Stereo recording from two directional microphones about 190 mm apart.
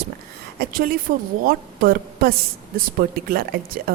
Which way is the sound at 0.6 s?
50° right (ahead or behind).